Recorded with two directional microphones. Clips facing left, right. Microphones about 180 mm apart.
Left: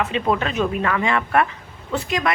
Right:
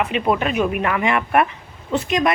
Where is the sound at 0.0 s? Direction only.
15° right (ahead or behind).